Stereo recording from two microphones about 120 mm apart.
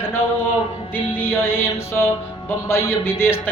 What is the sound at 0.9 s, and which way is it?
Speech, 20° left (ahead or behind).